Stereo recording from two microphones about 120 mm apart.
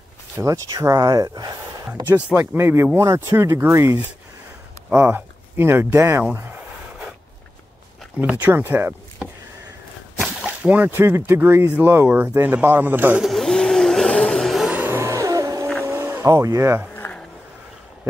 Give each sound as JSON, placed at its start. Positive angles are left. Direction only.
{"t": 0.4, "sound": "speech", "side_deg": -25}
{"t": 2.0, "sound": "speech", "side_deg": -10}
{"t": 2.3, "sound": "speech", "side_deg": -20}
{"t": 8.2, "sound": "speech", "side_deg": -15}
{"t": 10.2, "sound": "speech", "side_deg": -10}
{"t": 13.2, "sound": "vehicle", "side_deg": 0}
{"t": 14.7, "sound": "music", "side_deg": -15}
{"t": 15.8, "sound": "vehicle", "side_deg": -20}
{"t": 16.9, "sound": "a sound", "side_deg": 20}